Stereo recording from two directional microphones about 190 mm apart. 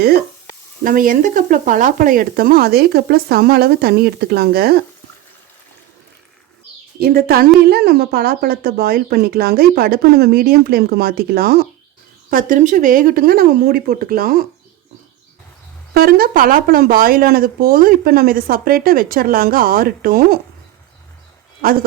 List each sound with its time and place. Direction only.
0.9 s speech: 45° right (ahead or behind)
7.0 s speech: 55° right (ahead or behind)
16.0 s speech: 50° right (ahead or behind)